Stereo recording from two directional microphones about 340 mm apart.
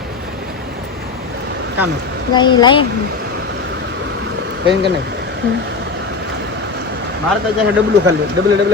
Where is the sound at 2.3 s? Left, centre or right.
Centre.